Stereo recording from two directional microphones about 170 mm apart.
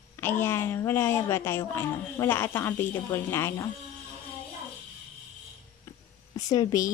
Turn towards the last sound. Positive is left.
turn(degrees=20)  # may be behind; listen again after turning